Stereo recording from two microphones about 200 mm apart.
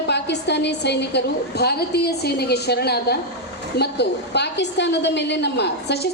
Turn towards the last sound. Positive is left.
turn(degrees=55)  # may be behind; listen again after turning